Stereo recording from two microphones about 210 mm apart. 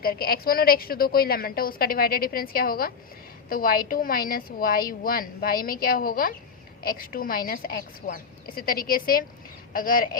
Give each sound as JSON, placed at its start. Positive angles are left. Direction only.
{"t": 0.0, "sound": "a woman's voice", "side_deg": 45}